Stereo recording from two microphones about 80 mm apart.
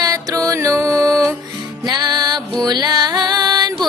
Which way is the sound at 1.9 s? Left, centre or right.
Right.